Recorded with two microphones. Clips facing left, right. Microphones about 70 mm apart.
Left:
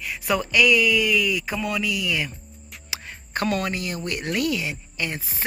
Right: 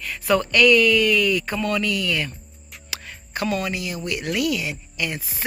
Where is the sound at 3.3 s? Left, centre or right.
Left.